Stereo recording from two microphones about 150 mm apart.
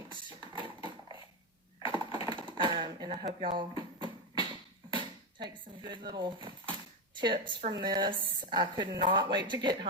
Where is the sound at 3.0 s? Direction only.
75° right (ahead or behind).